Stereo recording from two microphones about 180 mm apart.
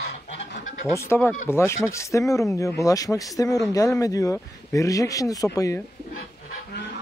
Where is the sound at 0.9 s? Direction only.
15° left (ahead or behind).